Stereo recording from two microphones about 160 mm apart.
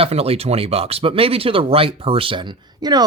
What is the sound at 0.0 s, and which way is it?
Speech, 40° right (ahead or behind).